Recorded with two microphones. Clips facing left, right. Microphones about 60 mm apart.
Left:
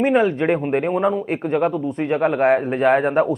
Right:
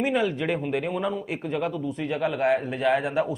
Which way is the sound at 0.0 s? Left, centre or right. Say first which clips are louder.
Left 7 dB; left.